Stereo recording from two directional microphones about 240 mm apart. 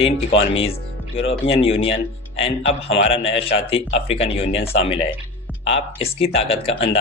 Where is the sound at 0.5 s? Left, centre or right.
Left.